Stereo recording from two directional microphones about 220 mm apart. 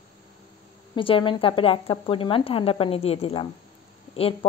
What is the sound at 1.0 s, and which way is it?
Speech, 25° left (ahead or behind).